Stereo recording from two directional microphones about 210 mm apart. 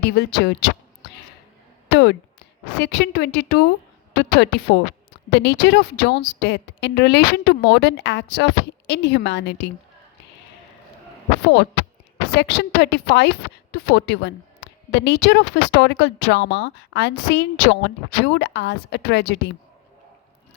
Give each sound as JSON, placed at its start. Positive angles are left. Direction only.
{"t": 0.0, "sound": "a woman's voice", "side_deg": 50}
{"t": 12.4, "sound": "speech", "side_deg": 55}